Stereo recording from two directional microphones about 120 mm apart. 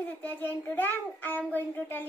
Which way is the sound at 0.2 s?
15° left (ahead or behind).